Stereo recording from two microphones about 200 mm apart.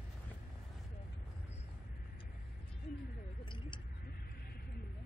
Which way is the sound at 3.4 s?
25° left (ahead or behind).